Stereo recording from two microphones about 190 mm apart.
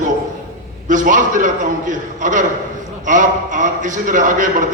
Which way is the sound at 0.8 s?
40° right (ahead or behind).